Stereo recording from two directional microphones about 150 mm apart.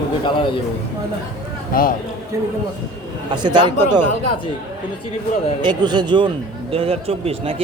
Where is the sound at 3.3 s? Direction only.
30° right (ahead or behind).